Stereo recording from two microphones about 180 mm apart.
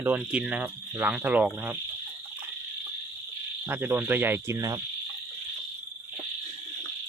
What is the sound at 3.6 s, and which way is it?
Speech, 10° right (ahead or behind).